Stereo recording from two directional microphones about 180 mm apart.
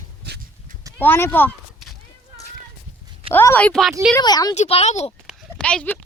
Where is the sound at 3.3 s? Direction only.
10° left (ahead or behind).